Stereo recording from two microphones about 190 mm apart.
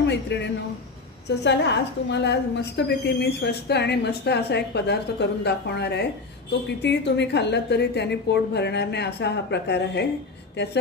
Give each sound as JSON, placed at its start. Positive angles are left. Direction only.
{"t": 0.0, "sound": "a woman's voice", "side_deg": 65}